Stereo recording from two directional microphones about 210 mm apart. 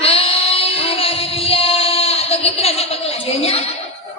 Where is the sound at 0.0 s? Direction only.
30° left (ahead or behind).